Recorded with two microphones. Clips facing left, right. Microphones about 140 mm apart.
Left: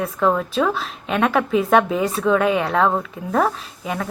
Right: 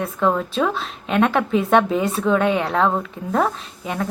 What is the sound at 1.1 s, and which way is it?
A woman's voice, 30° right (ahead or behind).